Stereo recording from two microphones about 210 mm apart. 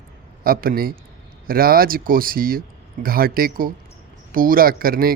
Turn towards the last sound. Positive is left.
turn(degrees=-45)  # may be behind; listen again after turning